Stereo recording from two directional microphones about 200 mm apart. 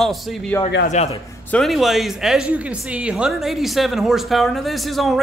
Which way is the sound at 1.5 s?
Centre (ahead or behind).